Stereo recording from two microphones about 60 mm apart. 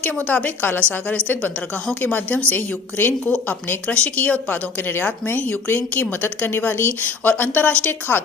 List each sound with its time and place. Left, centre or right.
0.3 s a woman's voice: left
2.0 s a woman's voice: left
4.2 s a woman's voice: left